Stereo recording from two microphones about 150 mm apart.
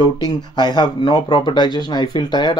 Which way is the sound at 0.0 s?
30° left (ahead or behind).